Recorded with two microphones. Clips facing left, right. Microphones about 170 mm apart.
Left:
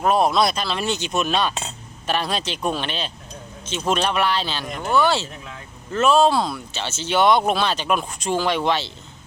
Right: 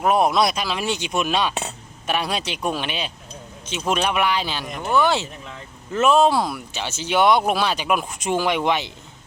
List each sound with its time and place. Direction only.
0.0 s speech: 15° right (ahead or behind)
4.9 s speech: 15° right (ahead or behind)